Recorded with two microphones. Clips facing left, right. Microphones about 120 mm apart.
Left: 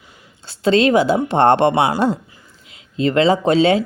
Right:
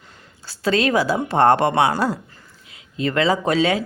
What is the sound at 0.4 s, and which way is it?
Speech, 25° left (ahead or behind).